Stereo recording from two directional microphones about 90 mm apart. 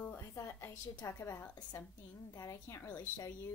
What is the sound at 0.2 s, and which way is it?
A woman's voice, 30° left (ahead or behind).